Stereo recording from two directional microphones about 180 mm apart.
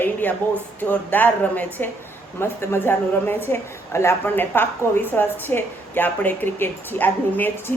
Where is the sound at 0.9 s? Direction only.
10° left (ahead or behind).